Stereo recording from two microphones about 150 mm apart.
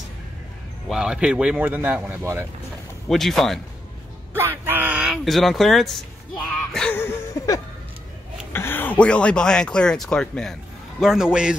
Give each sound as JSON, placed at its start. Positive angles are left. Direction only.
{"t": 0.8, "sound": "speech", "side_deg": -5}
{"t": 3.1, "sound": "speech", "side_deg": 0}
{"t": 4.3, "sound": "a sound", "side_deg": -15}
{"t": 6.7, "sound": "music", "side_deg": 5}
{"t": 7.0, "sound": "a sound", "side_deg": 20}
{"t": 8.5, "sound": "speech", "side_deg": 15}